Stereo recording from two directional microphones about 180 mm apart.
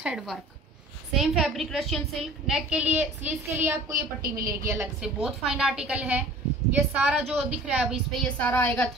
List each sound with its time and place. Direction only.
0.0 s a woman's voice: 5° right (ahead or behind)
3.9 s a woman's voice: 55° right (ahead or behind)
4.5 s a woman's voice: 15° right (ahead or behind)
5.0 s a woman's voice: 5° right (ahead or behind)